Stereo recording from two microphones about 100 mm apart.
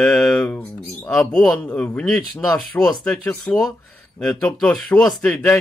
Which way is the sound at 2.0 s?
Centre (ahead or behind).